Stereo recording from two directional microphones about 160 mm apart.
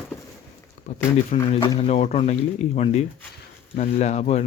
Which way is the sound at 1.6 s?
35° left (ahead or behind).